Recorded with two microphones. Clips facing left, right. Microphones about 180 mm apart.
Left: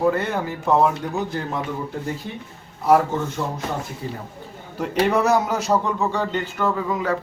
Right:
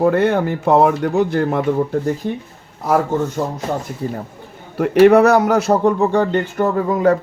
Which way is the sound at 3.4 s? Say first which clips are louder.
Right 5 dB; 40° right (ahead or behind).